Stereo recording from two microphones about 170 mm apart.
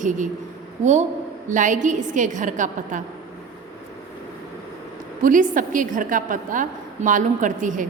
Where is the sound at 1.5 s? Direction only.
50° right (ahead or behind).